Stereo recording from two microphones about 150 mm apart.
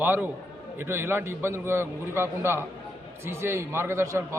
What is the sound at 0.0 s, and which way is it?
A man's voice, 10° right (ahead or behind).